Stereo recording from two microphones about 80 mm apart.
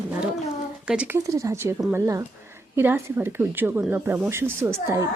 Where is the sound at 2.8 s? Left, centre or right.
Right.